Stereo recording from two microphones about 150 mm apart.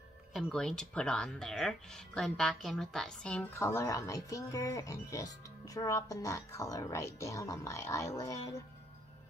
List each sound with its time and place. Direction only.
0.3 s speech: centre (ahead or behind); by 8.6 s 20° left (ahead or behind)